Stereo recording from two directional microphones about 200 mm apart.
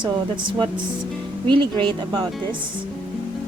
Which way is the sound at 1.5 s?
25° right (ahead or behind).